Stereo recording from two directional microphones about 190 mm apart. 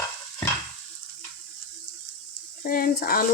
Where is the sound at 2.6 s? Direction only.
50° left (ahead or behind).